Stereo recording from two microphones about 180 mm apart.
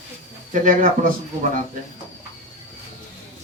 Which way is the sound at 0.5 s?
45° right (ahead or behind).